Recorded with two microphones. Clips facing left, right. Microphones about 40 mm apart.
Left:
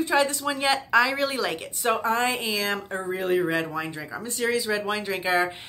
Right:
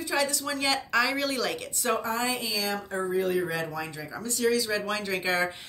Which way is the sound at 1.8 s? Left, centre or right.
Left.